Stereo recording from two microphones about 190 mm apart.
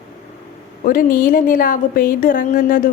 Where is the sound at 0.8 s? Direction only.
45° left (ahead or behind).